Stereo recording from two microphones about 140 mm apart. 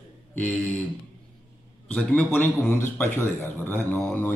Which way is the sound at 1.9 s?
10° left (ahead or behind).